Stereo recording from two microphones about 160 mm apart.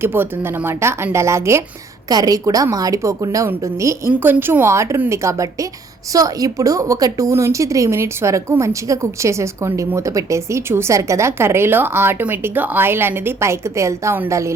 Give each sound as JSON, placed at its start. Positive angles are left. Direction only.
{"t": 0.0, "sound": "a woman's voice", "side_deg": -15}